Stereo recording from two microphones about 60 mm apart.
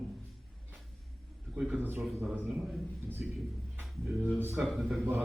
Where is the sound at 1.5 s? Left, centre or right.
Centre.